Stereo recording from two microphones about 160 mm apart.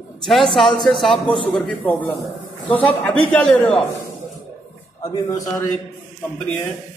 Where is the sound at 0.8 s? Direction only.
Centre (ahead or behind).